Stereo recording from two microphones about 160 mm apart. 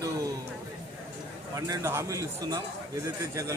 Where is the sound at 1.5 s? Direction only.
20° right (ahead or behind).